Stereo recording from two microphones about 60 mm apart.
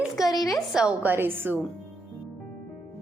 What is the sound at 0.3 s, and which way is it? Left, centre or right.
Speech, left.